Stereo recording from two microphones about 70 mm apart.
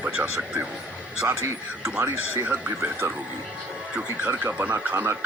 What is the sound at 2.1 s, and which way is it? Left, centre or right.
Speech, right.